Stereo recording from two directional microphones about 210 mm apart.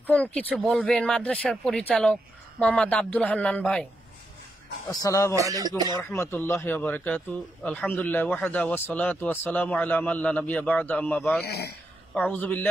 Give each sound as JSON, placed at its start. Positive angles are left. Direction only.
{"t": 0.0, "sound": "a man's voice", "side_deg": 5}
{"t": 4.8, "sound": "a man's voice", "side_deg": 15}
{"t": 5.3, "sound": "speech", "side_deg": -15}
{"t": 5.9, "sound": "a man's voice", "side_deg": 15}
{"t": 11.4, "sound": "a man's voice", "side_deg": 50}
{"t": 12.1, "sound": "a man's voice", "side_deg": 5}